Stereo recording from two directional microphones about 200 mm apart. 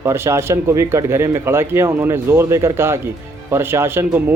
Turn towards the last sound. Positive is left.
turn(degrees=-10)  # may be behind; listen again after turning